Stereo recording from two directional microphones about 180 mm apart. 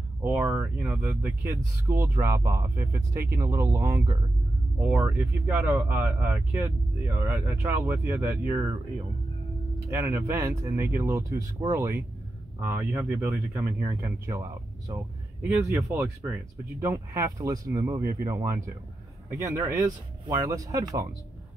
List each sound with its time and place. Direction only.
0.2 s speech: 10° right (ahead or behind)
9.8 s speech: 15° right (ahead or behind)